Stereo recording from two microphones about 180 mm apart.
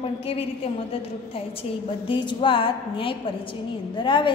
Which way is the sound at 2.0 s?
25° left (ahead or behind).